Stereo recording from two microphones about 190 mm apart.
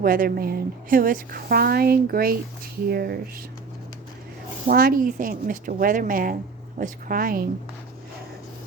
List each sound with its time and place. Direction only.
0.0 s a woman's voice: 50° right (ahead or behind)
4.7 s a woman's voice: 50° right (ahead or behind)